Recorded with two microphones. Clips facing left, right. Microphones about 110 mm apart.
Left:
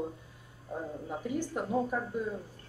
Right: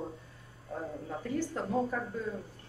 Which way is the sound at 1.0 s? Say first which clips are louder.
Even; 15° left (ahead or behind).